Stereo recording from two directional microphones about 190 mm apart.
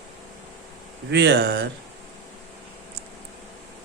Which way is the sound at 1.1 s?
60° right (ahead or behind).